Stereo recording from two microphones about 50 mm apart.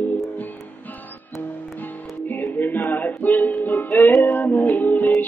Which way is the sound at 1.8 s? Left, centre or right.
Left.